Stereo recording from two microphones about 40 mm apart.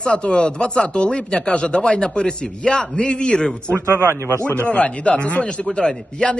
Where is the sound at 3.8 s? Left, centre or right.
Right.